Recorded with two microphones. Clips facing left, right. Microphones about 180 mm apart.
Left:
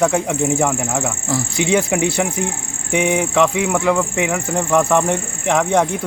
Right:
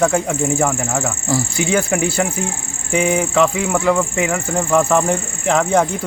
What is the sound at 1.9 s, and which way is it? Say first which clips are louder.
Speech: even; 10° left (ahead or behind).